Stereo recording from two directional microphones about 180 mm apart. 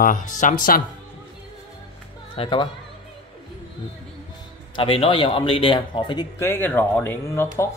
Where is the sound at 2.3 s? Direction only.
30° left (ahead or behind).